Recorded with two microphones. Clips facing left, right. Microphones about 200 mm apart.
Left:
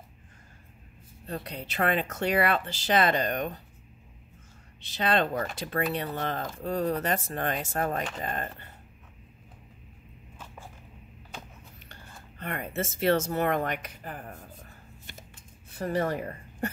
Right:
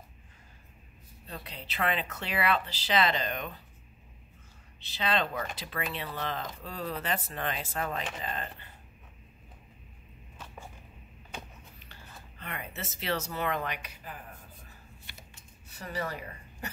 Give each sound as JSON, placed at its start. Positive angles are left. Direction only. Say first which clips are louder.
{"t": 1.2, "sound": "speech", "louder": "left 7 dB", "side_deg": 50}
{"t": 4.8, "sound": "speech", "louder": "left 4 dB", "side_deg": 50}
{"t": 12.4, "sound": "speech", "louder": "left 8 dB", "side_deg": 45}